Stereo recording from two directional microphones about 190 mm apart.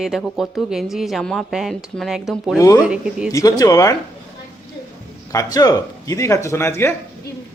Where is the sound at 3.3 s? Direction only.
20° left (ahead or behind).